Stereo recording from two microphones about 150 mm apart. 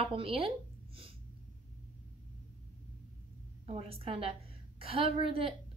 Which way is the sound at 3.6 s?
40° right (ahead or behind).